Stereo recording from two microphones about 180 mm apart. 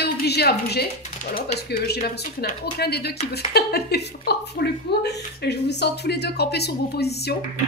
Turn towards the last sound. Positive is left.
turn(degrees=65)  # may be behind; listen again after turning